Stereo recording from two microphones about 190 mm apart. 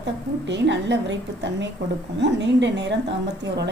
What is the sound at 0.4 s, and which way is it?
A woman's voice, 70° right (ahead or behind).